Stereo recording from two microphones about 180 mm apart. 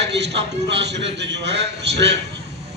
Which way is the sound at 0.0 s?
70° right (ahead or behind).